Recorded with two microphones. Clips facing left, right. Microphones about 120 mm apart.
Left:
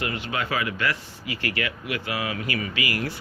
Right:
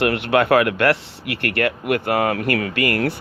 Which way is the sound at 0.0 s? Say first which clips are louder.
Right 11 dB; 70° right (ahead or behind).